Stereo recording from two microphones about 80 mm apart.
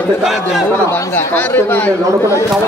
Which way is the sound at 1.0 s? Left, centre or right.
Left.